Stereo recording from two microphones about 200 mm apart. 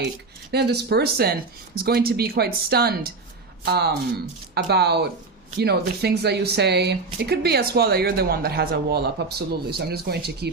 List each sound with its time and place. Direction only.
0.5 s speech: 55° right (ahead or behind)